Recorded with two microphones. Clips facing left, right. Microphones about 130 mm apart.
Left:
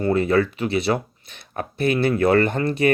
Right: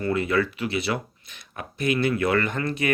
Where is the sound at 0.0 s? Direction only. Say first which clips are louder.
Left 5 dB; 35° left (ahead or behind).